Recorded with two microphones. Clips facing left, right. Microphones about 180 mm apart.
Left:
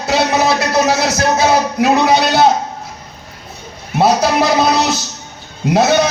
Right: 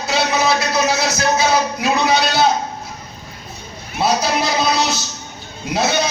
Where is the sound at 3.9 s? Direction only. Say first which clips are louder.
Left 6 dB; 55° left (ahead or behind).